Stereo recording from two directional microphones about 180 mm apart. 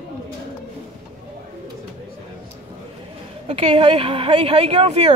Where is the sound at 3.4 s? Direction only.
35° right (ahead or behind).